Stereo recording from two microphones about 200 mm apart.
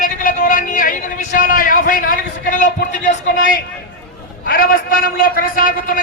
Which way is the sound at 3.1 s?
45° left (ahead or behind).